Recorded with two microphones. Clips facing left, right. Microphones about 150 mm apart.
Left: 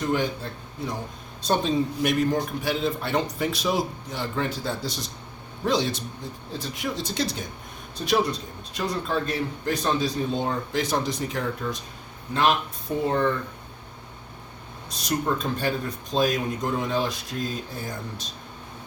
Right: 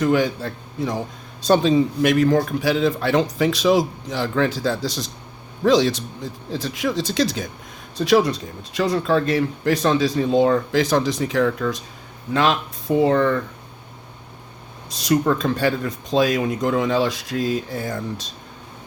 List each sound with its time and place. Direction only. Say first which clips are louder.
0.0 s a man's voice: right 7 dB; 90° right
14.8 s a man's voice: right 7 dB; 90° right